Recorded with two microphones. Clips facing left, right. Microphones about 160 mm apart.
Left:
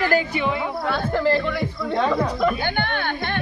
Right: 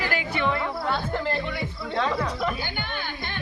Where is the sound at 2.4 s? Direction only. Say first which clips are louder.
Left 8 dB; 65° left (ahead or behind).